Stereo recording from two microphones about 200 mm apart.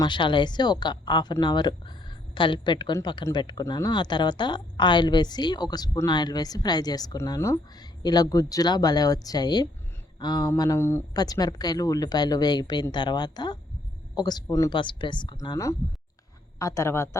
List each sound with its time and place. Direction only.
0.0 s speech: 25° left (ahead or behind)